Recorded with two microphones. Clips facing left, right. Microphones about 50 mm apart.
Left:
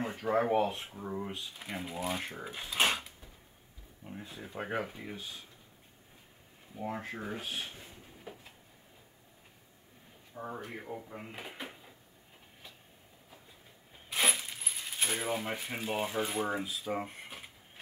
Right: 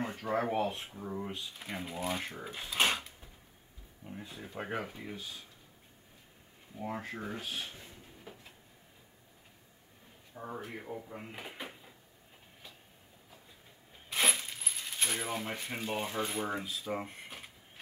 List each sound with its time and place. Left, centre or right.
0.0 s speech: centre
5.1 s speech: left
6.7 s speech: centre
10.3 s speech: centre
14.0 s coin: centre